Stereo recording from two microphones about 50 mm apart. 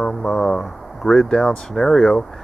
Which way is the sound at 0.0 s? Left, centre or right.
Centre.